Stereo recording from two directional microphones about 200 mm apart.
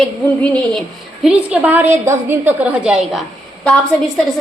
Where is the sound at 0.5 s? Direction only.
5° left (ahead or behind).